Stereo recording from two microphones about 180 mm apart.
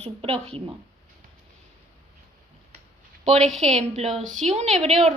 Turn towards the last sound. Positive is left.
turn(degrees=-35)  # may be behind; listen again after turning